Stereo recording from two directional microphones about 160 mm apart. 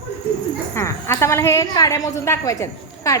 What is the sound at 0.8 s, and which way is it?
A woman's voice, 15° left (ahead or behind).